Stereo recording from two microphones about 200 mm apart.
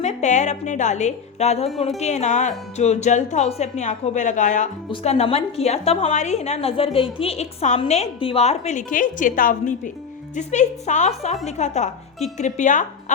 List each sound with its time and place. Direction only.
0.0 s a woman's voice: 35° left (ahead or behind)